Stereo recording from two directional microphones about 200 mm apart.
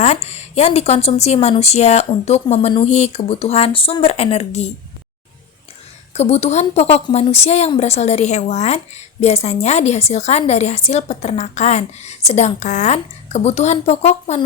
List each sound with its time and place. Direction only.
0.0 s a woman's voice: 35° left (ahead or behind)
6.1 s a woman's voice: 30° left (ahead or behind)